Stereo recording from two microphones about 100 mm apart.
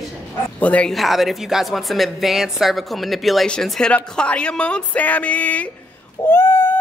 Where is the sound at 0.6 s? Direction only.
15° left (ahead or behind).